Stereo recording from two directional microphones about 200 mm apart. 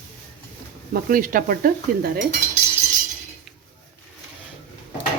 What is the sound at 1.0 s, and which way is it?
Speech, 45° right (ahead or behind).